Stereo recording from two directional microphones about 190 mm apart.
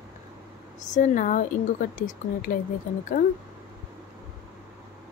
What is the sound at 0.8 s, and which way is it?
Speech, 40° left (ahead or behind).